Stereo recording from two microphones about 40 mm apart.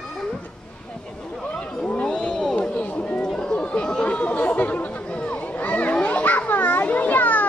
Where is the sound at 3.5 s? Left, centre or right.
Left.